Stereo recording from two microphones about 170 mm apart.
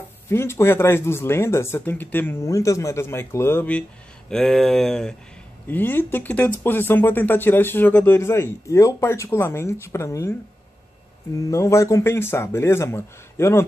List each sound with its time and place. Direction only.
0.3 s speech: 15° left (ahead or behind)
11.3 s speech: 20° left (ahead or behind)